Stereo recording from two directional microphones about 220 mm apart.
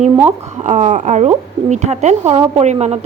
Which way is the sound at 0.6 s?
30° right (ahead or behind).